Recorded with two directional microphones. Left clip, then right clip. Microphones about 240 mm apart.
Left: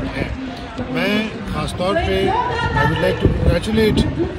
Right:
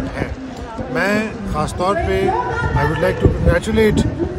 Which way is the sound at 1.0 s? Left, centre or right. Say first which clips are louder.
Right 2 dB; right.